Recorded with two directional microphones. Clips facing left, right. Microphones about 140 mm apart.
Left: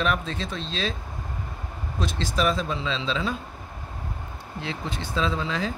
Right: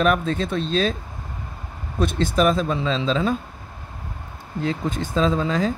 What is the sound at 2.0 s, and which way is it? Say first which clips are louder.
Speech: right 7 dB; 55° right (ahead or behind).